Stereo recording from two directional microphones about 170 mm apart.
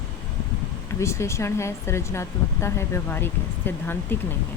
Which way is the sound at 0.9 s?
15° left (ahead or behind).